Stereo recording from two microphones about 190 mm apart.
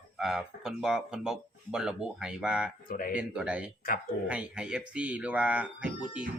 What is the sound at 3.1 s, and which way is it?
A man's voice, 5° right (ahead or behind).